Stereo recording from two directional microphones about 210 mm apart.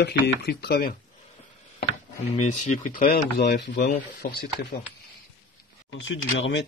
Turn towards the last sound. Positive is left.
turn(degrees=60)  # may be behind; listen again after turning